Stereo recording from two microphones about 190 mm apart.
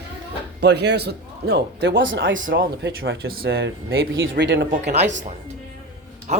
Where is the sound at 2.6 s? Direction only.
65° right (ahead or behind).